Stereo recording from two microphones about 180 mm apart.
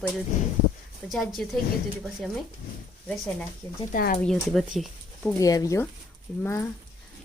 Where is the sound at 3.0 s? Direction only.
Centre (ahead or behind).